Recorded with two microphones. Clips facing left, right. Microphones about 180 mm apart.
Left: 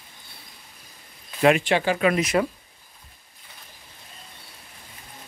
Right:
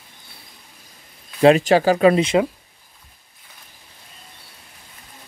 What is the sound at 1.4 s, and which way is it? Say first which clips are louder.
Speech: right 6 dB; 35° right (ahead or behind).